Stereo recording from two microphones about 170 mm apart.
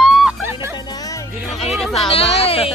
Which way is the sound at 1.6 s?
Centre (ahead or behind).